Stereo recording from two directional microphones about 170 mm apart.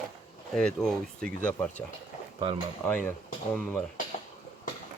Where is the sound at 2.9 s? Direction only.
10° left (ahead or behind).